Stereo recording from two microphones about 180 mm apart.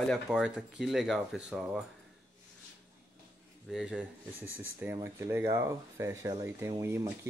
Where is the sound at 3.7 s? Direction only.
5° right (ahead or behind).